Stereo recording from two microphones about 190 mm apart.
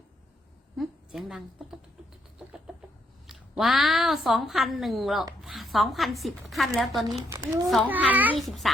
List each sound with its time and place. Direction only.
0.8 s speech: centre (ahead or behind)
2.7 s chicken: centre (ahead or behind)
3.2 s a woman's voice: centre (ahead or behind)
7.3 s a child's voice: 15° right (ahead or behind); by 8.7 s centre (ahead or behind)